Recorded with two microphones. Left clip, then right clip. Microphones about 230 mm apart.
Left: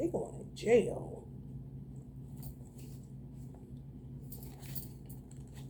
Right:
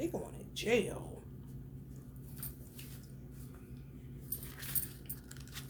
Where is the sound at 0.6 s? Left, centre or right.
Centre.